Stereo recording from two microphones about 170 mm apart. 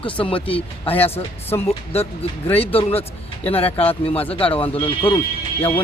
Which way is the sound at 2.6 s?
35° left (ahead or behind).